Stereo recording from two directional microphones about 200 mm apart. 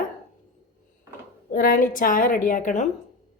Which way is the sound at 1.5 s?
45° left (ahead or behind).